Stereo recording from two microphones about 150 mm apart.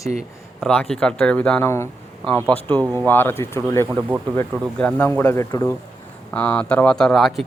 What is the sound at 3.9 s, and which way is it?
Speech, 10° right (ahead or behind).